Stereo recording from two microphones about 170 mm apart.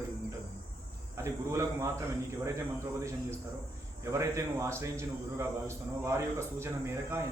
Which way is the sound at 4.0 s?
15° right (ahead or behind).